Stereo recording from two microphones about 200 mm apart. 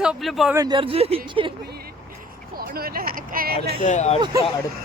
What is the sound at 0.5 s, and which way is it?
Speech, 20° right (ahead or behind).